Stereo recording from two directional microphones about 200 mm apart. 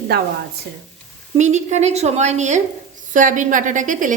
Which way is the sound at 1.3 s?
35° right (ahead or behind).